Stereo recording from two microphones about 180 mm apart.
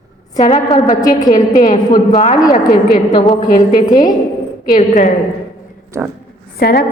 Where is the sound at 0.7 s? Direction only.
20° left (ahead or behind).